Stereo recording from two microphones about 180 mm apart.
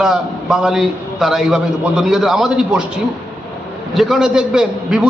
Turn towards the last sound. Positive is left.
turn(degrees=-5)  # may be behind; listen again after turning